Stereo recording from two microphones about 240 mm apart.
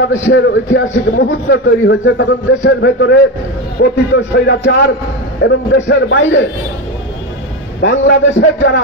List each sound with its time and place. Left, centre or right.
0.1 s a man's voice: left
7.8 s a man's voice: left